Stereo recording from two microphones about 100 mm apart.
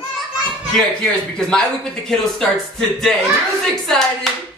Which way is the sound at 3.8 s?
5° left (ahead or behind).